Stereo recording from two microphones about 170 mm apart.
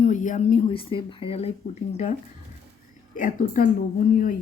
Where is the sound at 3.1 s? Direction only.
55° left (ahead or behind).